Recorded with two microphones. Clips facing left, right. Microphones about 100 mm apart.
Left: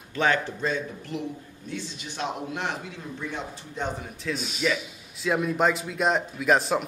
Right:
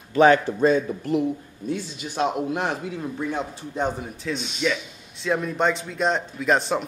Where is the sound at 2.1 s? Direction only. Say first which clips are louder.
Right 7 dB; 45° right (ahead or behind).